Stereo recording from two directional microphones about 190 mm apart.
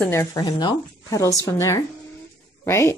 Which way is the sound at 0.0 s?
15° left (ahead or behind).